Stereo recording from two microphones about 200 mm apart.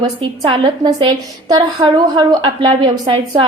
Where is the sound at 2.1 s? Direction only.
20° right (ahead or behind).